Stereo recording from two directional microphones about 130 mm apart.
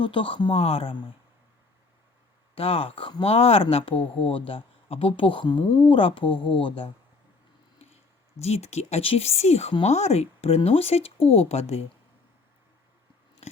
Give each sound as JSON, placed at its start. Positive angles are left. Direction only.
{"t": 0.0, "sound": "speech", "side_deg": 40}
{"t": 2.6, "sound": "speech", "side_deg": 45}
{"t": 8.4, "sound": "speech", "side_deg": 55}
{"t": 13.4, "sound": "chewing", "side_deg": 55}